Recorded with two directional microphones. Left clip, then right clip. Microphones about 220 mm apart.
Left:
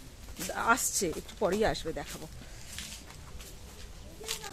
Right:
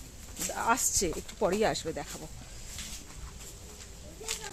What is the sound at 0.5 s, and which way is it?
Speech, 5° left (ahead or behind).